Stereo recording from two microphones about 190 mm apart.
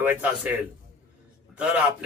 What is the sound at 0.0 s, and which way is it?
A man's voice, 10° right (ahead or behind).